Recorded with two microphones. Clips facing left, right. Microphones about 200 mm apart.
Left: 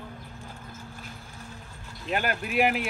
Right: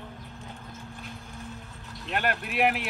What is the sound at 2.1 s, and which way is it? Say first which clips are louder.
Speech: left 1 dB; centre (ahead or behind).